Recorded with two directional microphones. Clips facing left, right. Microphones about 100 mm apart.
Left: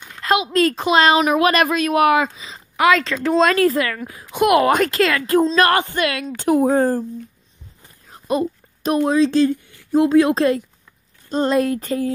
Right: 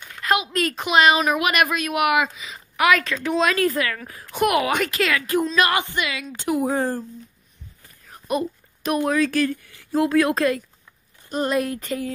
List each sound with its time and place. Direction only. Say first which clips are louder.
0.2 s a woman's voice: left 5 dB; 30° left (ahead or behind)
4.6 s speech: left 6 dB; 40° left (ahead or behind)
5.6 s a woman's voice: left 5 dB; 45° left (ahead or behind)
7.8 s speech: left 2 dB; 30° left (ahead or behind)